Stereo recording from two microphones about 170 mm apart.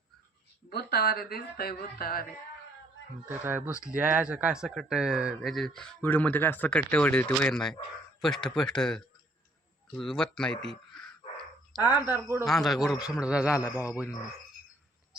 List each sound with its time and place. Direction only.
0.7 s speech: 70° left (ahead or behind)
3.2 s speech: 10° right (ahead or behind); by 10.6 s 5° left (ahead or behind)
11.8 s speech: 25° left (ahead or behind)
12.0 s speech: 15° right (ahead or behind)
12.5 s speech: centre (ahead or behind)